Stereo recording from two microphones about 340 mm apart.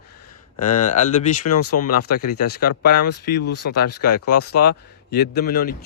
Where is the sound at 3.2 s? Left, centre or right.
Left.